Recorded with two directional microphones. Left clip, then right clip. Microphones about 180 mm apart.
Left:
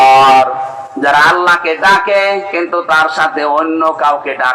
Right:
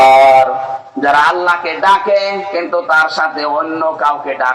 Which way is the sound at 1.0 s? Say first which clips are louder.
Left 2 dB; 25° left (ahead or behind).